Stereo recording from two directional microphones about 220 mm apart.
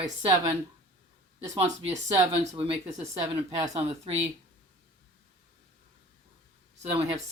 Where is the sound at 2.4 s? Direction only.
25° right (ahead or behind).